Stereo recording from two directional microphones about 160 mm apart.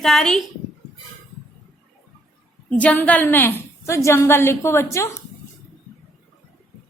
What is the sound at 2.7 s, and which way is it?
A woman's voice, 10° left (ahead or behind).